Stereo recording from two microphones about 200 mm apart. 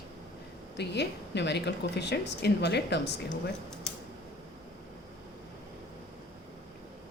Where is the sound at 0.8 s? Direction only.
60° left (ahead or behind).